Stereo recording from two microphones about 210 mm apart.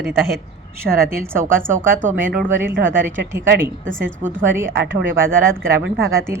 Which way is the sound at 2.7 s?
60° right (ahead or behind).